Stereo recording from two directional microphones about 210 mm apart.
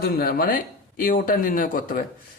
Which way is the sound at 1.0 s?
40° left (ahead or behind).